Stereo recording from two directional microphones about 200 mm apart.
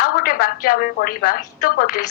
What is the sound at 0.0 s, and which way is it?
A woman's voice, 45° left (ahead or behind).